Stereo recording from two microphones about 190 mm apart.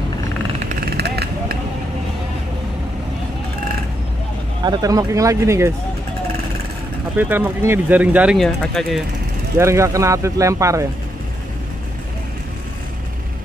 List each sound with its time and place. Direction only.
0.8 s vehicle: 60° right (ahead or behind)
4.6 s speech: 20° right (ahead or behind)
7.2 s speech: 10° right (ahead or behind)
9.6 s speech: 15° right (ahead or behind)